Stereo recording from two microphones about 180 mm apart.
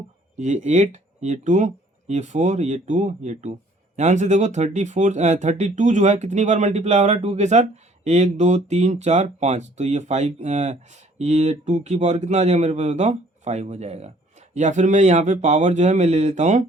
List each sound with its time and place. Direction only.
0.3 s speech: 40° right (ahead or behind)